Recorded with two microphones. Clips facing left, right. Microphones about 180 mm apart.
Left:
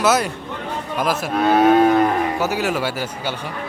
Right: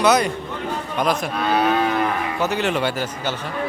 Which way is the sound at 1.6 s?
40° left (ahead or behind).